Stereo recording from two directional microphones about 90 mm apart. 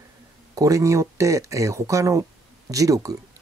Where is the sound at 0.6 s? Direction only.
40° right (ahead or behind).